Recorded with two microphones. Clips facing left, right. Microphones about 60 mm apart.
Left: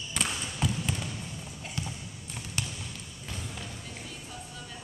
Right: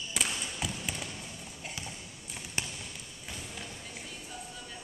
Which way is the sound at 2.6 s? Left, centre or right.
Right.